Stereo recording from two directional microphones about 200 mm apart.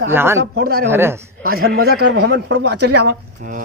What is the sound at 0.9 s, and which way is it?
Speech, 10° right (ahead or behind).